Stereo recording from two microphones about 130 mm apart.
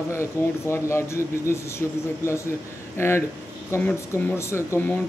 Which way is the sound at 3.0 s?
20° left (ahead or behind).